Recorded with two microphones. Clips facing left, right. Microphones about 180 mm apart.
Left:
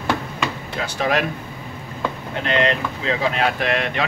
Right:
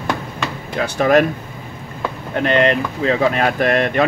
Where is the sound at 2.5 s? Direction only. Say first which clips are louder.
Right 4 dB; 55° right (ahead or behind).